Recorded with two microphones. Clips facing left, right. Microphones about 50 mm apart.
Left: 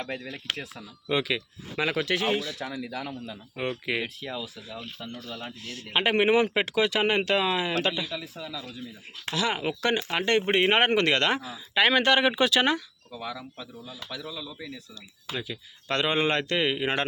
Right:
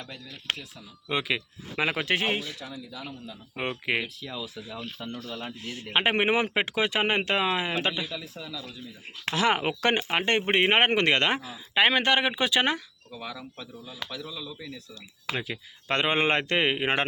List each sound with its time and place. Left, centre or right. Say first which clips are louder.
0.5 s speech: left 5 dB; left
1.3 s speech: even; centre
2.0 s speech: left 1 dB; right
2.6 s speech: left 6 dB; left
3.5 s speech: right 1 dB; right
4.4 s speech: right 2 dB; centre
5.5 s speech: right 1 dB; centre
8.1 s speech: left 2 dB; centre
9.2 s speech: right 3 dB; right; by 12.8 s centre
13.1 s speech: left 2 dB; centre
15.3 s speech: right 2 dB; right